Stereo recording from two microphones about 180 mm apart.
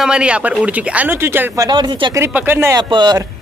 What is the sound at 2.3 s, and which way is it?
Speech, 10° right (ahead or behind).